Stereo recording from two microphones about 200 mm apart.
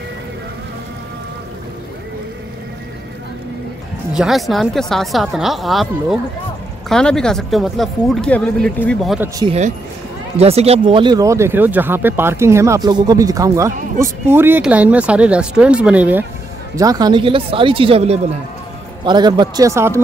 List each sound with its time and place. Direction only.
4.1 s speech: centre (ahead or behind)
9.5 s speech: 35° right (ahead or behind); by 16.3 s 5° right (ahead or behind)
16.7 s speech: 20° right (ahead or behind)